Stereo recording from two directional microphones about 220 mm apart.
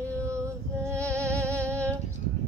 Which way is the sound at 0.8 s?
15° right (ahead or behind).